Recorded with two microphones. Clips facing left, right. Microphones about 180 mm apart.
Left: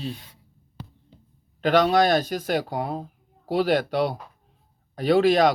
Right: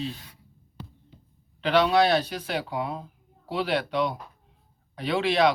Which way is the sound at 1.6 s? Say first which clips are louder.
Left 2 dB; 45° left (ahead or behind).